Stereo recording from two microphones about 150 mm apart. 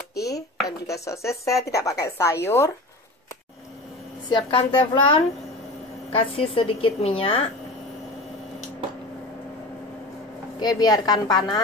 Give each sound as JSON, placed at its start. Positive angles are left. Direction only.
{"t": 0.7, "sound": "speech", "side_deg": 20}
{"t": 4.3, "sound": "a woman's voice", "side_deg": 35}
{"t": 10.6, "sound": "speech", "side_deg": 25}